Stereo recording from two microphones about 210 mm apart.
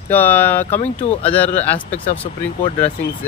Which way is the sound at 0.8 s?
30° left (ahead or behind).